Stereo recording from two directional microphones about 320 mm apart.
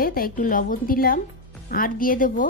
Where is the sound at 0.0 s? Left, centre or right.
Left.